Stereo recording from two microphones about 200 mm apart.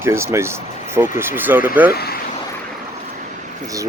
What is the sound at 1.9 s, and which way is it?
Speech, 50° left (ahead or behind).